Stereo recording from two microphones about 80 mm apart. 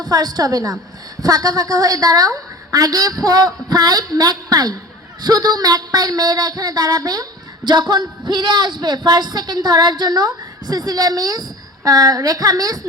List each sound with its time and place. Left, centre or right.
0.0 s speech: right
7.6 s speech: right